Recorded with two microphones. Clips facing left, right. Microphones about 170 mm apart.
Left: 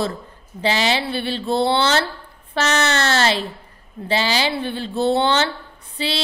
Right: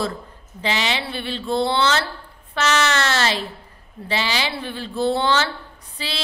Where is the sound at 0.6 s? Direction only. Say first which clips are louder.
Left 4 dB; 35° left (ahead or behind).